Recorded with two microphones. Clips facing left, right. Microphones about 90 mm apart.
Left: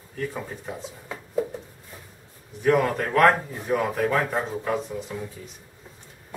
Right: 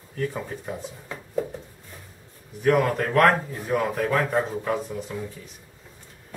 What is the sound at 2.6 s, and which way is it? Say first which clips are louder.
Speech: even; centre (ahead or behind).